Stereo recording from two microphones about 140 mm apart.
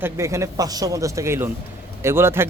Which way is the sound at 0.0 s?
20° right (ahead or behind).